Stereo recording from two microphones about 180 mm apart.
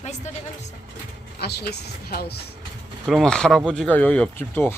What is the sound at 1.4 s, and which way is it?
A woman's voice, 65° left (ahead or behind).